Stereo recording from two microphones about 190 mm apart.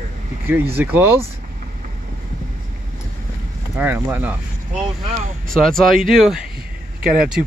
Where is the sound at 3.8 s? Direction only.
10° right (ahead or behind).